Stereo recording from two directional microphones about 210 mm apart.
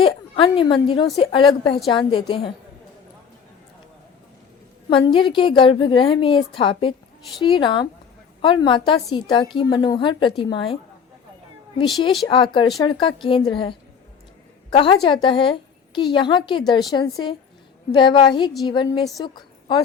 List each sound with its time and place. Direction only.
0.0 s a woman's voice: 25° left (ahead or behind)
4.9 s a woman's voice: 25° left (ahead or behind)
12.8 s a woman's voice: 20° left (ahead or behind)